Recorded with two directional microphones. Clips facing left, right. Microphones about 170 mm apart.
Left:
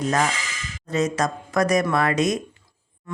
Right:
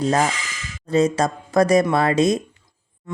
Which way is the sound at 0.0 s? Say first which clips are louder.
Right 3 dB; 30° right (ahead or behind).